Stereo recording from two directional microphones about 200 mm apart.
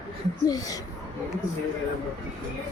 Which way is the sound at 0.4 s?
20° left (ahead or behind).